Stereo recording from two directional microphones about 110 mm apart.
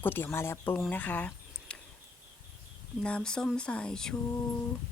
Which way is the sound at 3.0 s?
10° left (ahead or behind).